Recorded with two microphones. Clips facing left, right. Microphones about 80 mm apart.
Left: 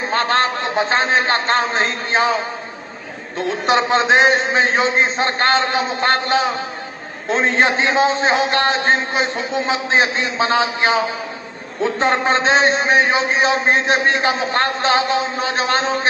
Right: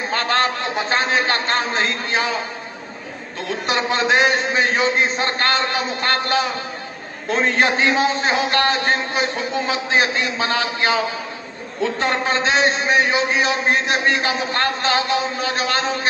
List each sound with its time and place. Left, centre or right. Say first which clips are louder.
0.1 s a man's voice: left 2 dB; left
3.3 s a man's voice: left 5 dB; left